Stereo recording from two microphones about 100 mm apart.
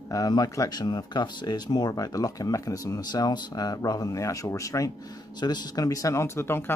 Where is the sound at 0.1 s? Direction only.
35° left (ahead or behind).